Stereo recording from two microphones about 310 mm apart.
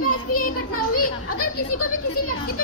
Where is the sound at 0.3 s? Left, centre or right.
Left.